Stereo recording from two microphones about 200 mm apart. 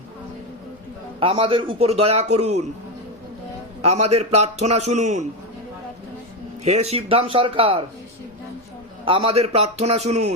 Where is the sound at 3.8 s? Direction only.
30° right (ahead or behind).